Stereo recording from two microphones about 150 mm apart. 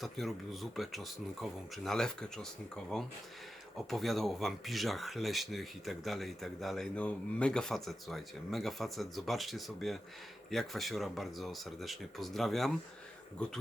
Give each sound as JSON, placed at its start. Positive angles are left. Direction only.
{"t": 0.0, "sound": "speech", "side_deg": 0}